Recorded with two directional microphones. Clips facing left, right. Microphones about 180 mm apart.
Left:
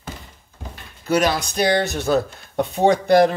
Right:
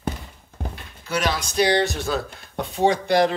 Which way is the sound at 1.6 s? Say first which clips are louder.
Even; 50° left (ahead or behind).